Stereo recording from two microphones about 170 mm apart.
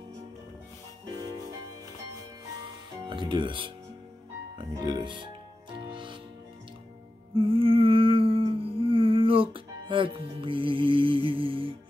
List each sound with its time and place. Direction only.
3.1 s speech: 25° right (ahead or behind)
5.9 s music: 30° right (ahead or behind)
7.3 s humming: 30° right (ahead or behind)